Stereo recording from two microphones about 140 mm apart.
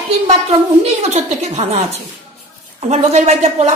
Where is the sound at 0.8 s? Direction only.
50° right (ahead or behind).